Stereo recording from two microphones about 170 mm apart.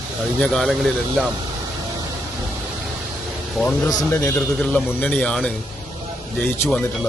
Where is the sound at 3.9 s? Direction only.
15° left (ahead or behind).